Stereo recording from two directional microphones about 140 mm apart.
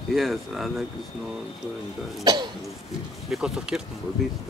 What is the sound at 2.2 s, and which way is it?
Speech, 30° right (ahead or behind).